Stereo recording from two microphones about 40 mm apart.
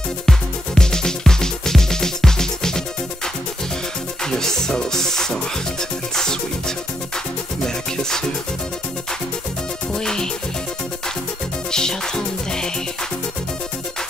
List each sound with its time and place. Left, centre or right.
0.3 s music: centre
4.2 s music: centre
9.9 s music: centre
11.7 s music: centre